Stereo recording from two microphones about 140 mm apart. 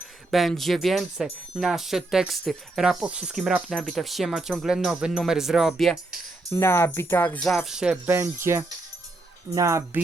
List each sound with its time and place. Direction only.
0.3 s speech: centre (ahead or behind)
6.5 s speech: 20° left (ahead or behind)
7.4 s speech: centre (ahead or behind); by 10.0 s 20° right (ahead or behind)